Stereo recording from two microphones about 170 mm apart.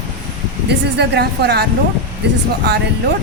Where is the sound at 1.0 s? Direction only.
75° right (ahead or behind).